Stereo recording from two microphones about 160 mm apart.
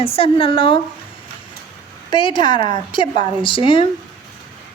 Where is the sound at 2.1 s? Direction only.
30° left (ahead or behind).